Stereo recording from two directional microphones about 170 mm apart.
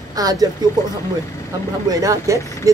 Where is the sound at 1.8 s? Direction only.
20° right (ahead or behind).